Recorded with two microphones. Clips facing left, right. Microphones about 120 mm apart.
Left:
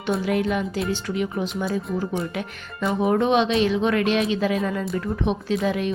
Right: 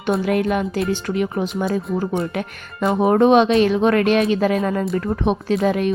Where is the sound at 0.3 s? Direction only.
55° right (ahead or behind).